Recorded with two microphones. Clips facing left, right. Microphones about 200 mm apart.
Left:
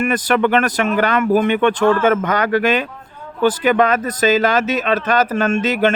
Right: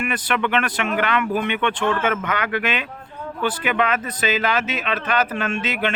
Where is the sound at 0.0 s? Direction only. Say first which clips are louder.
Left 7 dB; 40° left (ahead or behind).